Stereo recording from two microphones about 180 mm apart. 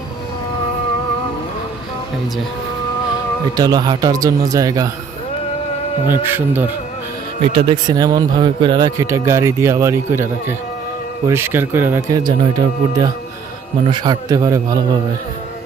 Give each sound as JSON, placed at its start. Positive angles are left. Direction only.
{"t": 3.6, "sound": "speech", "side_deg": -20}
{"t": 6.1, "sound": "speech", "side_deg": -10}
{"t": 7.4, "sound": "speech", "side_deg": -30}